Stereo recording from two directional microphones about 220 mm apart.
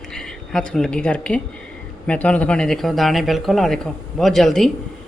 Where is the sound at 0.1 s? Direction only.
5° left (ahead or behind).